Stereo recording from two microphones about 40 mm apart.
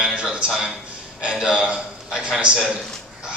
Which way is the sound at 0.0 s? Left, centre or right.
Centre.